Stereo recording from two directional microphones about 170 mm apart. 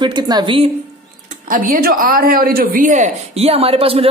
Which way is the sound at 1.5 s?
55° right (ahead or behind).